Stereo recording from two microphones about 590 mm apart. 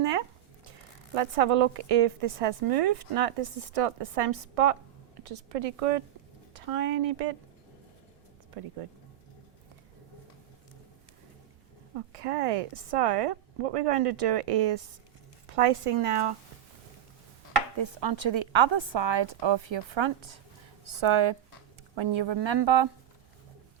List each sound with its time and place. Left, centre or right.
0.0 s speech: right
8.8 s a woman's voice: right
11.9 s a woman's voice: right
17.7 s a woman's voice: right